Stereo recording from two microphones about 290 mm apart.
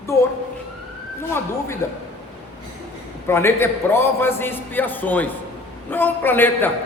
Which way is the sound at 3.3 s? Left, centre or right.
Centre.